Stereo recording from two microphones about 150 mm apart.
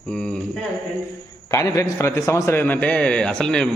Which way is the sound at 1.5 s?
20° left (ahead or behind).